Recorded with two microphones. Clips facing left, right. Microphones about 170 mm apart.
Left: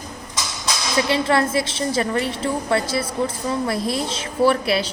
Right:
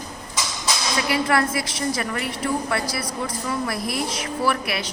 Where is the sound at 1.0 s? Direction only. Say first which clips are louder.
Left 1 dB; 25° left (ahead or behind).